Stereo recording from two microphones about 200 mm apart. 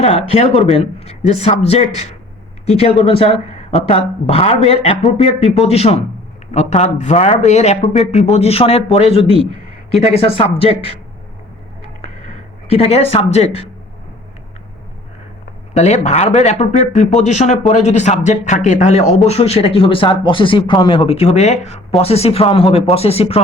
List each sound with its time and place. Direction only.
0.0 s speech: 30° left (ahead or behind)
12.6 s speech: 30° left (ahead or behind)
15.7 s speech: 35° left (ahead or behind)